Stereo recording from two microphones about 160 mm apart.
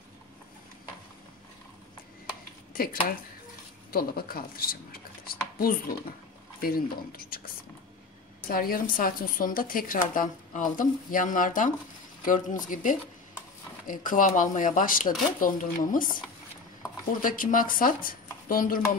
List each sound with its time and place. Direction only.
2.7 s a woman's voice: 65° left (ahead or behind)
17.2 s a woman's voice: 60° left (ahead or behind)